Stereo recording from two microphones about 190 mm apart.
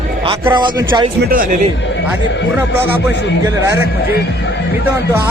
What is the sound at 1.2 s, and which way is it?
Speech, 50° right (ahead or behind).